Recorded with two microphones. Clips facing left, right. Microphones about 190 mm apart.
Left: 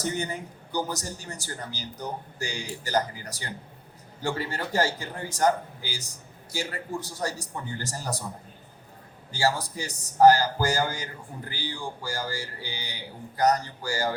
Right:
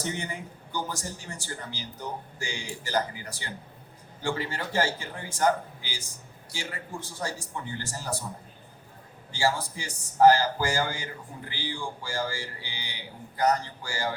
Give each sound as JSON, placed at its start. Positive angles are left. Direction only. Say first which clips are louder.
{"t": 0.0, "sound": "a man's voice", "louder": "left 3 dB", "side_deg": 40}
{"t": 6.5, "sound": "a man's voice", "louder": "left 5 dB", "side_deg": 40}
{"t": 9.3, "sound": "a man's voice", "louder": "left 1 dB", "side_deg": 40}